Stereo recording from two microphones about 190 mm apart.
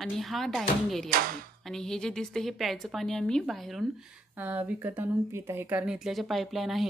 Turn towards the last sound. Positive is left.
turn(degrees=0)  # may be behind; listen again after turning